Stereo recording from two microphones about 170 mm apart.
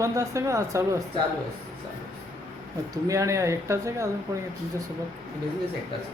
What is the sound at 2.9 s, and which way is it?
Speech, 20° right (ahead or behind).